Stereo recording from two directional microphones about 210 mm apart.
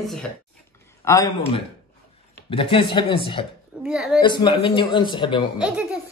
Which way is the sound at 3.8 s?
5° right (ahead or behind).